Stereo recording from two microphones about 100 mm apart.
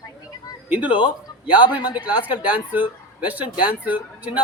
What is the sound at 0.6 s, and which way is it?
Speech, 15° right (ahead or behind).